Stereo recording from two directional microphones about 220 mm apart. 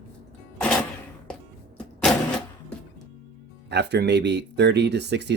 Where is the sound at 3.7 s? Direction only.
50° right (ahead or behind).